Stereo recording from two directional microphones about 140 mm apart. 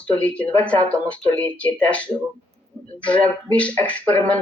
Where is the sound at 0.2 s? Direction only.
10° left (ahead or behind).